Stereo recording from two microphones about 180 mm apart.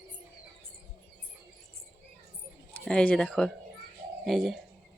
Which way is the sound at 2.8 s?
5° left (ahead or behind).